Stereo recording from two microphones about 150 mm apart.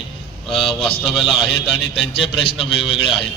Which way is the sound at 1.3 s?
35° left (ahead or behind).